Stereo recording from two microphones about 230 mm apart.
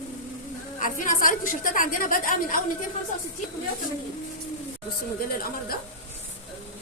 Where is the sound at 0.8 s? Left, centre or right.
Left.